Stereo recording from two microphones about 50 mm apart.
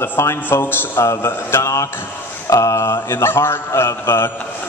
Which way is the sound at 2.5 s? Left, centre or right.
Left.